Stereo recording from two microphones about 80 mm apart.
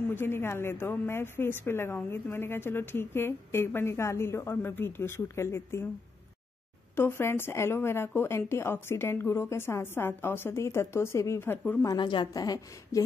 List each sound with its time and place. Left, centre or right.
0.1 s a woman's voice: left
7.0 s a woman's voice: left
12.0 s a woman's voice: left
12.4 s a woman's voice: left